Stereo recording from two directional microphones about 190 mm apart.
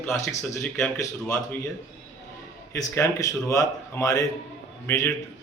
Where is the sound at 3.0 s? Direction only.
15° left (ahead or behind).